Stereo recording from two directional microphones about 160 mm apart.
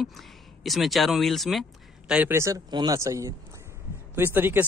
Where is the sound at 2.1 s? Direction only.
10° right (ahead or behind).